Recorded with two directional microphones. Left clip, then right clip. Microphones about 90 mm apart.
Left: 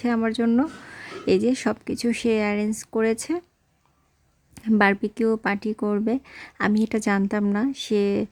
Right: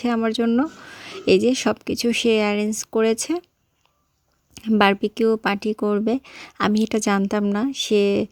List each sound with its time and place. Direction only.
0.0 s speech: 25° right (ahead or behind)
4.8 s speech: 25° right (ahead or behind)